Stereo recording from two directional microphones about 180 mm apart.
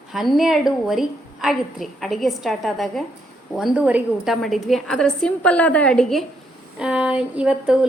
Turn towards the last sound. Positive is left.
turn(degrees=-5)  # may be behind; listen again after turning